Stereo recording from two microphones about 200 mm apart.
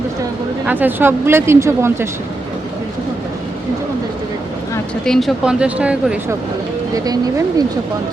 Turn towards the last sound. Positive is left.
turn(degrees=-20)  # may be behind; listen again after turning